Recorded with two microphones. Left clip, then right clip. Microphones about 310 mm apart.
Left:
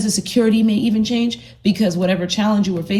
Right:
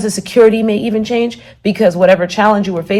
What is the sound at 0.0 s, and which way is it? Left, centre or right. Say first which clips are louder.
Speech: right 9 dB; centre.